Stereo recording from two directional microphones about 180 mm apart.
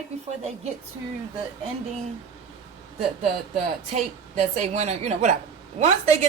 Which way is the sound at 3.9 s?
40° right (ahead or behind).